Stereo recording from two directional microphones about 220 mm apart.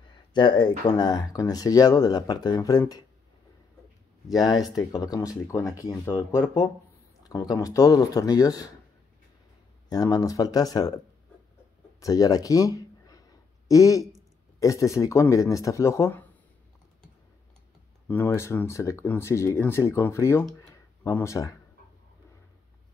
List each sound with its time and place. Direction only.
0.3 s speech: 20° left (ahead or behind)
4.4 s speech: 20° left (ahead or behind)
9.8 s speech: 15° left (ahead or behind)
12.0 s a man's voice: 15° left (ahead or behind)
18.0 s speech: 10° left (ahead or behind)